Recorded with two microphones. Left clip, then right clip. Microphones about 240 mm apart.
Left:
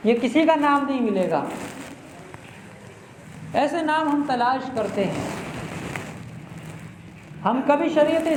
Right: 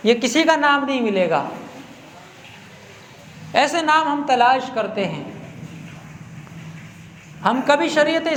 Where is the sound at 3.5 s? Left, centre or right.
Right.